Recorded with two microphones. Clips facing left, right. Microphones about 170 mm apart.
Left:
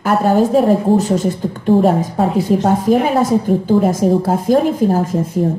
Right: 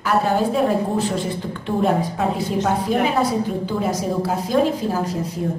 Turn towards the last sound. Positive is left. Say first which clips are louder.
# left 8 dB
turn(degrees=50)  # may be behind; listen again after turning